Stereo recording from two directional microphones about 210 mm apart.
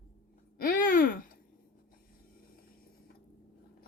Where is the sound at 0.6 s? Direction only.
40° left (ahead or behind).